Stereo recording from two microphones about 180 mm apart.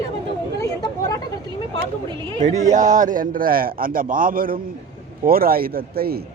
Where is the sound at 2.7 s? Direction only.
45° right (ahead or behind).